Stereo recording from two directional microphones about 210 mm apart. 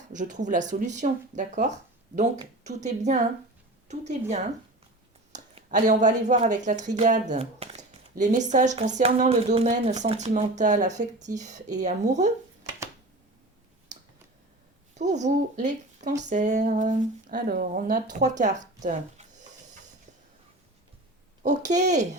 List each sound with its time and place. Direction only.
0.1 s speech: 35° right (ahead or behind)
14.9 s speech: 35° right (ahead or behind)
21.4 s speech: 35° right (ahead or behind)